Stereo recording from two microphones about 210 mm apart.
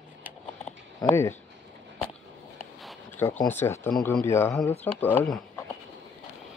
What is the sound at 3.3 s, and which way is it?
Speech, 10° left (ahead or behind).